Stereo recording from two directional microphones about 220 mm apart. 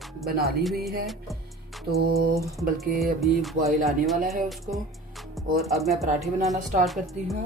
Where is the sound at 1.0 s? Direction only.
Centre (ahead or behind).